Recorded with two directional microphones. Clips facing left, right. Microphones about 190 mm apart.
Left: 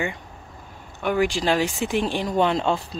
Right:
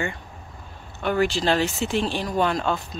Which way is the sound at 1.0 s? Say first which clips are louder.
Even; 10° left (ahead or behind).